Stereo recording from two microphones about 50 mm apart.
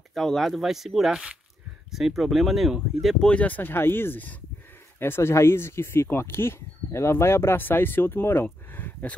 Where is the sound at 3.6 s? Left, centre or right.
Left.